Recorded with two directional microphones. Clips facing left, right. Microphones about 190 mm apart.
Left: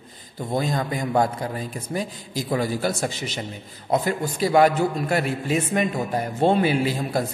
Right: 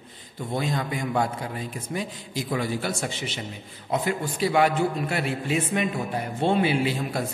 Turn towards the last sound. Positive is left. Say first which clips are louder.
# left 2 dB
turn(degrees=40)  # may be behind; listen again after turning